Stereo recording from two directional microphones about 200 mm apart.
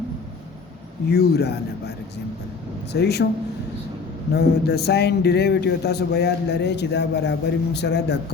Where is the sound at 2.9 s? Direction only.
55° left (ahead or behind).